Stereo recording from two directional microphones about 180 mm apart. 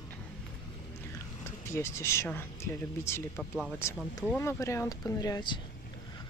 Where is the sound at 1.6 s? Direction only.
15° left (ahead or behind).